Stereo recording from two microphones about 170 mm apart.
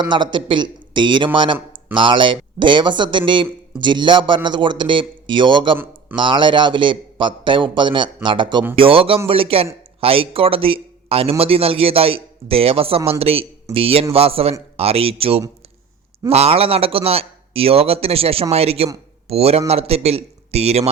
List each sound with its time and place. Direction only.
0.0 s a man's voice: 25° right (ahead or behind)